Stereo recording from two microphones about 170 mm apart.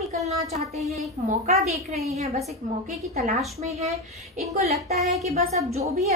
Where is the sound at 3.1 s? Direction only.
40° right (ahead or behind).